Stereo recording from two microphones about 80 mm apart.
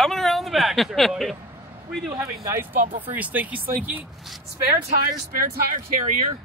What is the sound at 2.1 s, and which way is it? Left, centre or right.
Speech, right.